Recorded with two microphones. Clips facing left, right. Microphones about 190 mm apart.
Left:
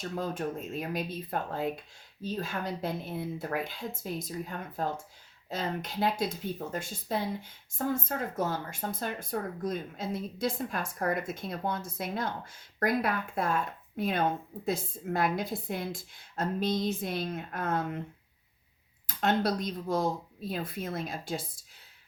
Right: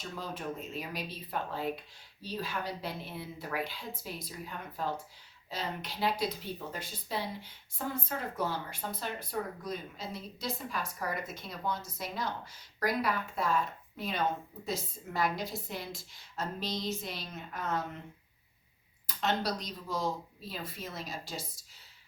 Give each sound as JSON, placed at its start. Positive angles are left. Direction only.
{"t": 0.2, "sound": "speech", "side_deg": 50}
{"t": 19.0, "sound": "speech", "side_deg": 55}